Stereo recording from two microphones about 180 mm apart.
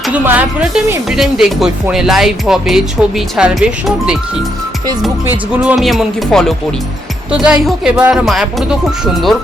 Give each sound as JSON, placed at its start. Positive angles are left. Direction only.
{"t": 0.1, "sound": "speech", "side_deg": -10}
{"t": 5.6, "sound": "speech", "side_deg": 0}